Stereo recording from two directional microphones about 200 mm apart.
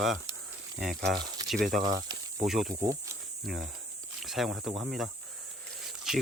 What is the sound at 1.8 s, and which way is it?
Speech, 20° right (ahead or behind).